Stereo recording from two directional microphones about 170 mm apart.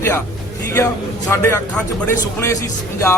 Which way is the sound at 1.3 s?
10° left (ahead or behind).